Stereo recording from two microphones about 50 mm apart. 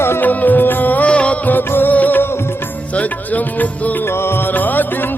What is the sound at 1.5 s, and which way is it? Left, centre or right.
Music, left.